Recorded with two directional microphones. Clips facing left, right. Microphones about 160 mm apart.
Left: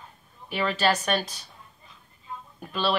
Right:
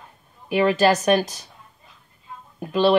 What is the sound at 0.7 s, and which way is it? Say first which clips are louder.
Speech: right 5 dB; 40° right (ahead or behind).